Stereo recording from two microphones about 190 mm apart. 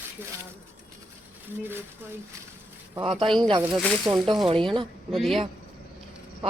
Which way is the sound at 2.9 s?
25° right (ahead or behind).